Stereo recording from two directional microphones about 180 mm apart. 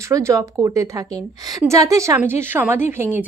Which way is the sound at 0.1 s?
20° right (ahead or behind).